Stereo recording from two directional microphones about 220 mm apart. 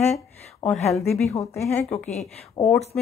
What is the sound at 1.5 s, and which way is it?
A woman's voice, 10° left (ahead or behind).